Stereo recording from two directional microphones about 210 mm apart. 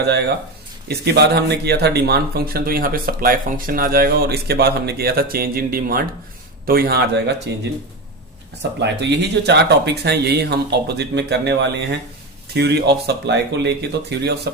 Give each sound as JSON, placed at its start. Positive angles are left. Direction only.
{"t": 0.9, "sound": "a man's voice", "side_deg": -50}
{"t": 8.8, "sound": "a man's voice", "side_deg": -55}